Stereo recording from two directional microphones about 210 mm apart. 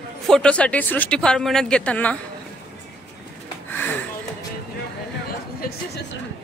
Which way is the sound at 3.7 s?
10° left (ahead or behind).